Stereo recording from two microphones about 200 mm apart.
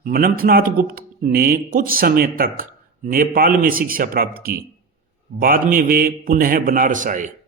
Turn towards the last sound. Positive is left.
turn(degrees=-40)  # may be behind; listen again after turning